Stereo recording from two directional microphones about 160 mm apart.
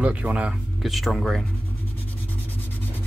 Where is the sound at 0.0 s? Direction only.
10° right (ahead or behind).